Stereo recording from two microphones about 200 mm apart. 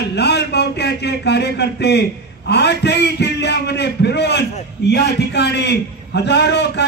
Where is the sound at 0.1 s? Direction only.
55° left (ahead or behind).